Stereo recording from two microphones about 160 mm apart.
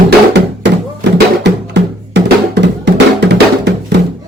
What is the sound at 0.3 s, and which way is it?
Music, 90° right.